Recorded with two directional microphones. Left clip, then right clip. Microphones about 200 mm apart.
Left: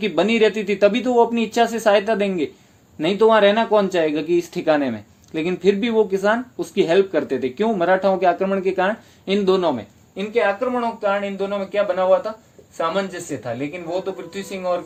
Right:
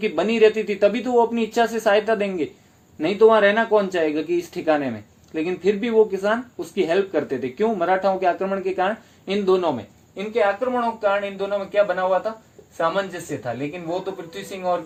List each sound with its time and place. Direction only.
0.0 s speech: 45° left (ahead or behind)
10.2 s a man's voice: 35° left (ahead or behind)